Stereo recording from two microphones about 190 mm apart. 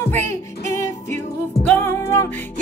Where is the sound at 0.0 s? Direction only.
10° left (ahead or behind).